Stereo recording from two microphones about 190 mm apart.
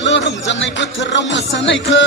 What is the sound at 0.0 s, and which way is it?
Music, 70° left (ahead or behind).